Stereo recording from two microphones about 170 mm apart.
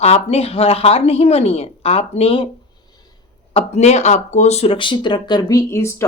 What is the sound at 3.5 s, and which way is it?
Speech, 40° left (ahead or behind).